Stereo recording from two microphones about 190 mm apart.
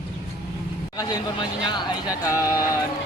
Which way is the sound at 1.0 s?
20° left (ahead or behind).